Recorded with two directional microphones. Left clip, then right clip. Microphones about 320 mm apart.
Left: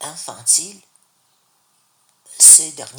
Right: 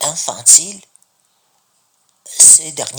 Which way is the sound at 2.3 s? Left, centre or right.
Right.